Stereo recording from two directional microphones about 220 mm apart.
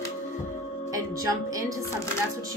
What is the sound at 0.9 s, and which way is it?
Speech, 15° right (ahead or behind).